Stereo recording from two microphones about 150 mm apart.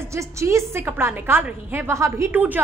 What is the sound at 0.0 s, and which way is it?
A woman's voice, 20° right (ahead or behind).